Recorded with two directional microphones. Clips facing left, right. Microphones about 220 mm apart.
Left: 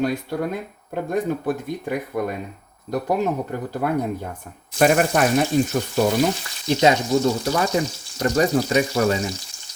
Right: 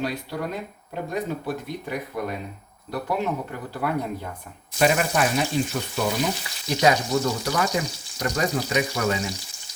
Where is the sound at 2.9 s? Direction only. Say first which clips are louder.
Left 5 dB; 45° left (ahead or behind).